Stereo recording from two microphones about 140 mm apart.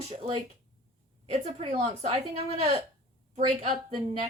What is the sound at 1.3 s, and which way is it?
A woman's voice, 50° right (ahead or behind).